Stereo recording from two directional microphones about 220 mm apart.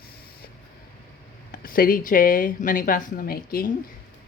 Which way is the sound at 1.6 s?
40° left (ahead or behind).